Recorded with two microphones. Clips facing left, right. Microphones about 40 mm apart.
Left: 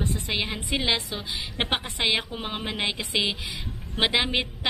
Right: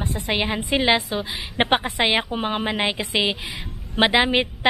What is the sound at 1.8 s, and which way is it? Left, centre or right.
Speech, right.